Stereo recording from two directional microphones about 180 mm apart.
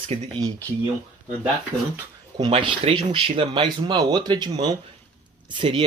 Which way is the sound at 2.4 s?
25° right (ahead or behind).